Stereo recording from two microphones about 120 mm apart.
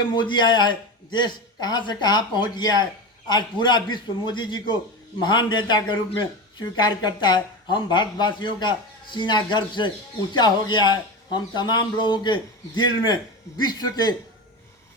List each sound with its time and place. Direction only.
0.1 s speech: 40° left (ahead or behind)